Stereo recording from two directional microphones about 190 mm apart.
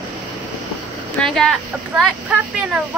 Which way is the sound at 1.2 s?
Centre (ahead or behind).